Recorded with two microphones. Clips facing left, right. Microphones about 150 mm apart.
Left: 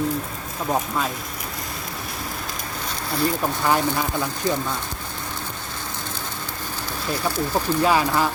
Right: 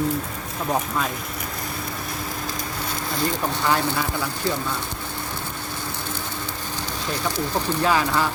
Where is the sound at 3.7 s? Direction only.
15° left (ahead or behind).